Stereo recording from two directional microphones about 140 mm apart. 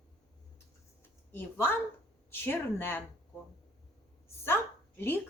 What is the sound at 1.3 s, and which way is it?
A woman's voice, 15° left (ahead or behind).